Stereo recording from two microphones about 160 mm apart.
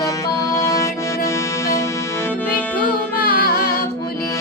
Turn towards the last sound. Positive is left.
turn(degrees=70)  # may be behind; listen again after turning